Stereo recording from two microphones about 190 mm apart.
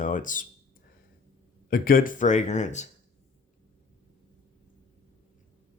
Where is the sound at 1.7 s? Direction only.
50° left (ahead or behind).